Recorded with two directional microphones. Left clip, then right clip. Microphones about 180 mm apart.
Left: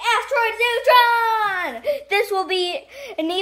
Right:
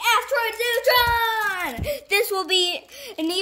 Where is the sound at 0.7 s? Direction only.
20° right (ahead or behind).